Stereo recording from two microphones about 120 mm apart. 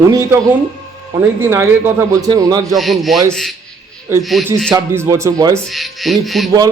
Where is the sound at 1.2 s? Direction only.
20° right (ahead or behind).